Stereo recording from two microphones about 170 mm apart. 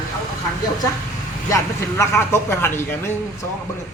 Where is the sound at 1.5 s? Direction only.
15° left (ahead or behind).